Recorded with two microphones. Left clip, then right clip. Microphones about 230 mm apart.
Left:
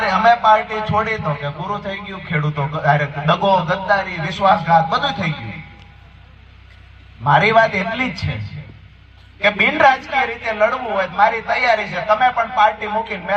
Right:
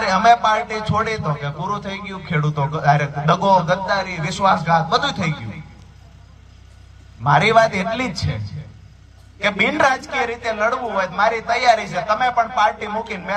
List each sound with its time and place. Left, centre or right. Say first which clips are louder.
0.0 s a man's voice: left 1 dB; centre
7.3 s a man's voice: left 1 dB; centre
9.4 s a man's voice: left 3 dB; centre